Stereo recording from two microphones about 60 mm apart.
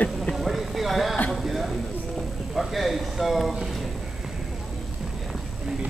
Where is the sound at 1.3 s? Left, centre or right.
Centre.